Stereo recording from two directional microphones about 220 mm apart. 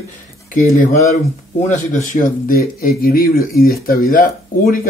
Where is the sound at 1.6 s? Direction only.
35° left (ahead or behind).